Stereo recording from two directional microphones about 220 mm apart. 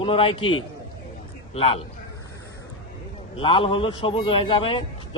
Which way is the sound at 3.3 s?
25° left (ahead or behind).